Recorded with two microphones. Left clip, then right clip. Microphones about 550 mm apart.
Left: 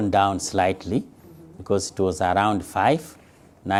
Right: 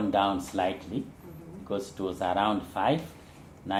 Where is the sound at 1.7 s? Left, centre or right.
Left.